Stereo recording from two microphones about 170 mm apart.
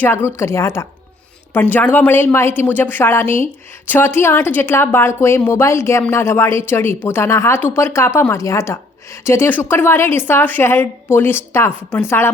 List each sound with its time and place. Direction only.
0.0 s a woman's voice: 15° left (ahead or behind)